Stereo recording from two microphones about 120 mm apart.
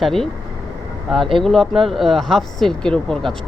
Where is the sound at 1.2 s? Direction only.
45° right (ahead or behind).